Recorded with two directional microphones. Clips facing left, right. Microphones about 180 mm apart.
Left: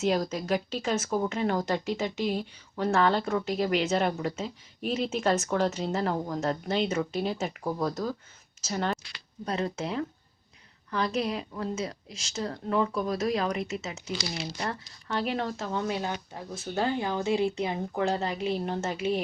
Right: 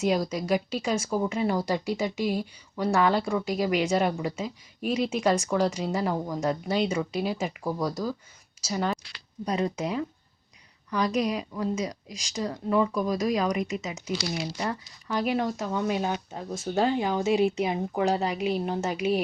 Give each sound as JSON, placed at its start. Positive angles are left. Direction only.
{"t": 0.1, "sound": "speech", "side_deg": -10}